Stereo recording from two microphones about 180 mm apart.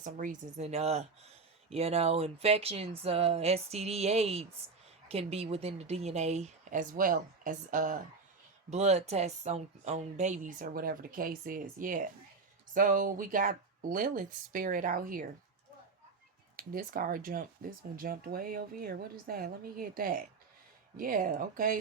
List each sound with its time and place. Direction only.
0.0 s a woman's voice: 45° right (ahead or behind)
16.6 s speech: 50° right (ahead or behind)